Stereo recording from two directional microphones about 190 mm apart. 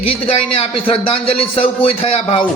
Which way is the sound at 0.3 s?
30° left (ahead or behind).